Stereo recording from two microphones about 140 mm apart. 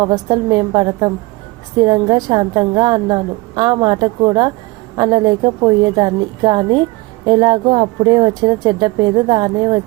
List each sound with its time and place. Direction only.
0.0 s a woman's voice: 30° right (ahead or behind)